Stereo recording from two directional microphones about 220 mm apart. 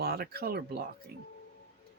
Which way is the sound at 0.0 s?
45° right (ahead or behind).